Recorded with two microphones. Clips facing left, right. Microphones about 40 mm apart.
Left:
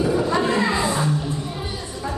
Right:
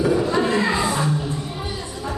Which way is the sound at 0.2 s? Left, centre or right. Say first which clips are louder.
Even; centre.